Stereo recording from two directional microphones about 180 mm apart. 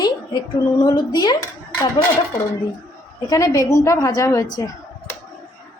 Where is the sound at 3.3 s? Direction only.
15° left (ahead or behind).